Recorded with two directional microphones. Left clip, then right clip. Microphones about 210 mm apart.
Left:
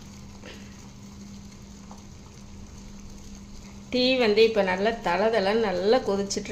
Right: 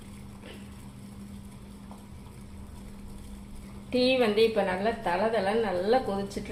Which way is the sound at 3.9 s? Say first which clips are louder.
Left 3 dB; 20° left (ahead or behind).